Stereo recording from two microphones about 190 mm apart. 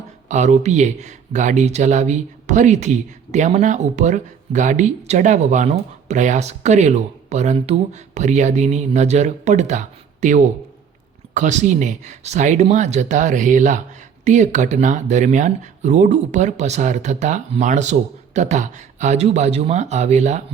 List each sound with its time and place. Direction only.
0.3 s speech: 40° right (ahead or behind)